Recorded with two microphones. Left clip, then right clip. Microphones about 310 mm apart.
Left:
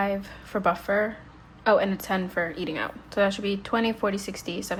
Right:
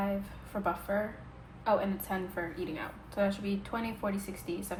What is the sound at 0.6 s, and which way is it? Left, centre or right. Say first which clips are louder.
A woman's voice: left 9 dB; left.